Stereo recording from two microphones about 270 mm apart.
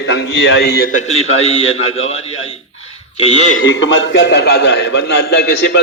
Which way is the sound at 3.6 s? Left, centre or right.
Left.